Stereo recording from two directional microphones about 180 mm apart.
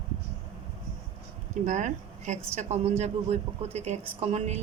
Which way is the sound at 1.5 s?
45° right (ahead or behind).